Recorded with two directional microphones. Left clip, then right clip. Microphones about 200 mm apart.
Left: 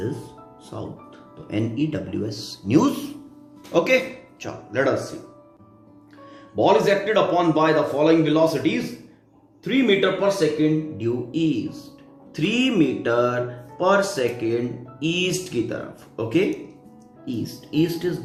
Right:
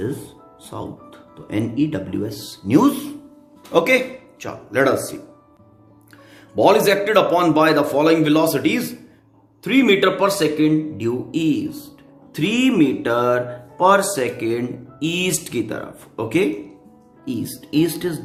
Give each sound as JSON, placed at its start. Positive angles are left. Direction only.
{"t": 0.7, "sound": "speech", "side_deg": -35}
{"t": 6.6, "sound": "a man's voice", "side_deg": -45}